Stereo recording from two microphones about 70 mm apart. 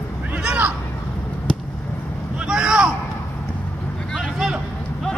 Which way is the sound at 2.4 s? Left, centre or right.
Centre.